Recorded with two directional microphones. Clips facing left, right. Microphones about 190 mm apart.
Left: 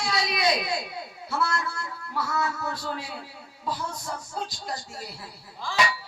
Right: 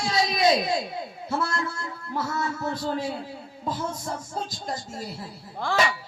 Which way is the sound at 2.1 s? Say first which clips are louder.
Even; 50° right (ahead or behind).